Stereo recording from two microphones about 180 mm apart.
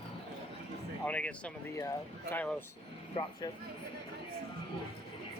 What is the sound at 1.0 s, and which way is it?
Speech, 5° left (ahead or behind).